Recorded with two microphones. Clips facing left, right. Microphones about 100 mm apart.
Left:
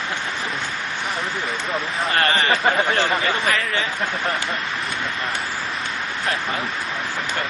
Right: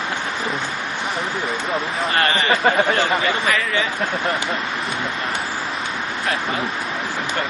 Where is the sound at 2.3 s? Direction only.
15° right (ahead or behind).